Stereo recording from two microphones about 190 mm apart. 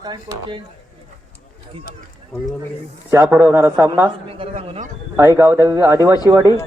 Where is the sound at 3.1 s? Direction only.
10° right (ahead or behind).